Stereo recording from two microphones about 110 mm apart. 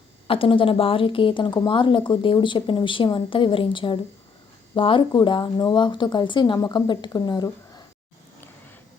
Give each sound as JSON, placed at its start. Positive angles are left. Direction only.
{"t": 0.3, "sound": "speech", "side_deg": 55}